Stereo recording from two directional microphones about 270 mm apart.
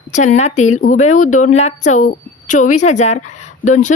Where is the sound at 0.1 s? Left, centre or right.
Left.